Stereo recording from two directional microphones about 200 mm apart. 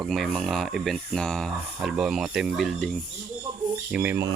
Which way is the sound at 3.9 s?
10° right (ahead or behind).